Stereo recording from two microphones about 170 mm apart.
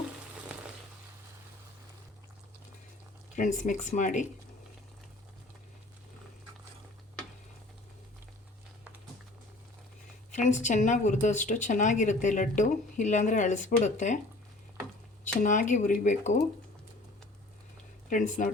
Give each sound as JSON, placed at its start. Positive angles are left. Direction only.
{"t": 3.3, "sound": "speech", "side_deg": 45}
{"t": 10.3, "sound": "speech", "side_deg": 45}
{"t": 15.2, "sound": "speech", "side_deg": 45}
{"t": 18.1, "sound": "speech", "side_deg": 50}